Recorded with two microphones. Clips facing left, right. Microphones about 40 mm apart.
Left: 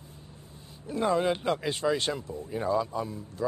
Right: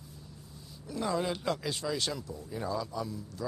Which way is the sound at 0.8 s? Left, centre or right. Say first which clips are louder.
Left 6 dB; left.